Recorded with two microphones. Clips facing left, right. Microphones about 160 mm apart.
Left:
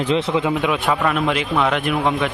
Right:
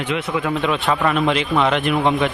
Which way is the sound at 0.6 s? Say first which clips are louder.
Even; 10° left (ahead or behind).